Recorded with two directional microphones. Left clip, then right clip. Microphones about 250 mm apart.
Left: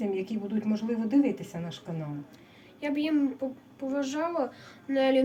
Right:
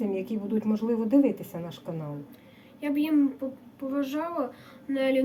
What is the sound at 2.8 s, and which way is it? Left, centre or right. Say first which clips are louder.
A woman's voice: right 3 dB; centre.